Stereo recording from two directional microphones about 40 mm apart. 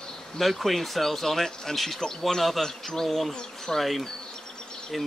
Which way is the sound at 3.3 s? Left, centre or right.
Centre.